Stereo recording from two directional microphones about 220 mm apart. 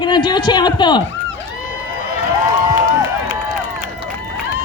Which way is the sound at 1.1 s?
55° left (ahead or behind).